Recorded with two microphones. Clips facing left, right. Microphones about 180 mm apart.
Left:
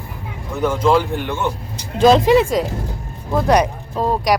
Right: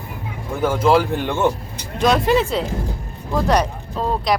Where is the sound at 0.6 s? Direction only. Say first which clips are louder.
Even; 5° right (ahead or behind).